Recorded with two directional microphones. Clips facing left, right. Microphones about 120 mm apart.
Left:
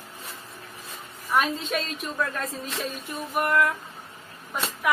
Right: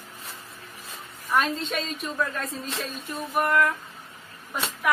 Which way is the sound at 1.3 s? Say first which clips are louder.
Even; centre (ahead or behind).